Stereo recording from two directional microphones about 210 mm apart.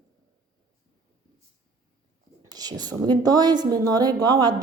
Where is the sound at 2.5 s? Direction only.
20° right (ahead or behind).